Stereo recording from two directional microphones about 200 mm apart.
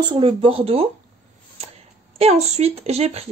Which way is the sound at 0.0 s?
25° right (ahead or behind).